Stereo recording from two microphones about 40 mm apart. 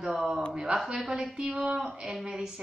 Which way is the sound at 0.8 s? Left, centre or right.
Centre.